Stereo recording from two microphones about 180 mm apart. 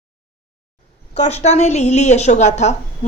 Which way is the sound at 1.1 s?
35° left (ahead or behind).